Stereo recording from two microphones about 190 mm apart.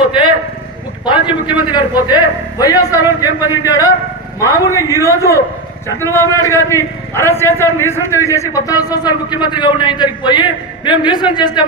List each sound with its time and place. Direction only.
1.0 s a man's voice: 25° left (ahead or behind)